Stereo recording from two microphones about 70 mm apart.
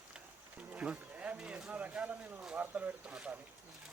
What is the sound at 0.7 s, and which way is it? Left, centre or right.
Speech, centre.